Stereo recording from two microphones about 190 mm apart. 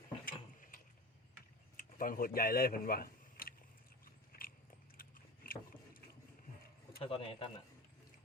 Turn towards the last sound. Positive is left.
turn(degrees=25)  # may be behind; listen again after turning